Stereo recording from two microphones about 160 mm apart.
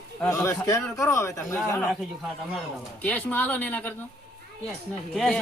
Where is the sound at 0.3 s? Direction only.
20° left (ahead or behind).